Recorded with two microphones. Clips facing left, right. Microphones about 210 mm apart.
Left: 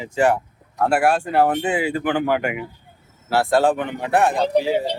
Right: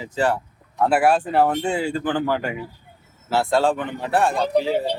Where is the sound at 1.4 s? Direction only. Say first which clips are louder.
Left 1 dB; 10° left (ahead or behind).